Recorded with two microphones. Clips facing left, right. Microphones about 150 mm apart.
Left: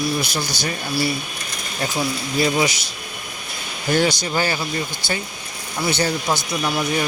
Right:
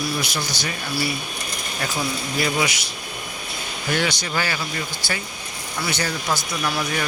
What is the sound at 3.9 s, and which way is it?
Speech, 40° left (ahead or behind).